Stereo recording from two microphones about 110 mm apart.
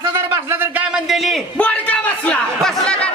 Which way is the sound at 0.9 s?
Centre (ahead or behind).